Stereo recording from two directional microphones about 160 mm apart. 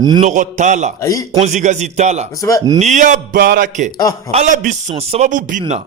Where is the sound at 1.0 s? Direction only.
20° left (ahead or behind).